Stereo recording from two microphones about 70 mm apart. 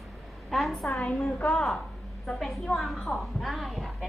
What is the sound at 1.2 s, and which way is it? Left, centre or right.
Speech, left.